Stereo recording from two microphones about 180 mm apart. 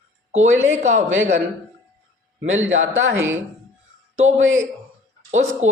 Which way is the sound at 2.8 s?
90° right.